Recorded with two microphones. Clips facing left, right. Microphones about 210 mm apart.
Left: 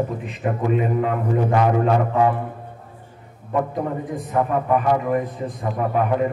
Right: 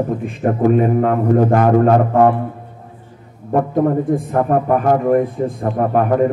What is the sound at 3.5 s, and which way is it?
A man's voice, 55° right (ahead or behind).